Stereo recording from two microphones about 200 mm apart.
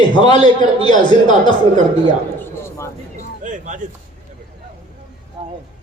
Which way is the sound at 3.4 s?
40° right (ahead or behind).